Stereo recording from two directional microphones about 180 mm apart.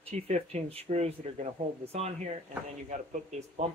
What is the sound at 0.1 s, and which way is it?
Speech, 35° right (ahead or behind).